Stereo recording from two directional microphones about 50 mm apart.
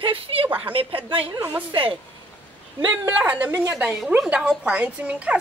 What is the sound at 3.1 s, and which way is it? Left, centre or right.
A woman's voice, right.